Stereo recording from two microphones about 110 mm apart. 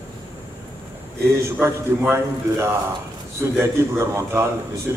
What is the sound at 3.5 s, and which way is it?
Speech, 25° right (ahead or behind).